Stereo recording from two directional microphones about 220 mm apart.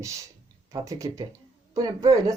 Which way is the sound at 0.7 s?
15° right (ahead or behind).